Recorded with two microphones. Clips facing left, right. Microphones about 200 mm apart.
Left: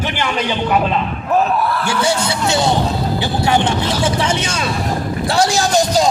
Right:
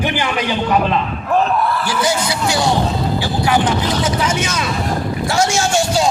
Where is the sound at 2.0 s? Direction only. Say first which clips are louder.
Even; 25° left (ahead or behind).